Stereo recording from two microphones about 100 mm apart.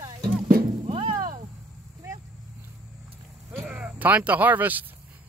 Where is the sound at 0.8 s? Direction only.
75° right (ahead or behind).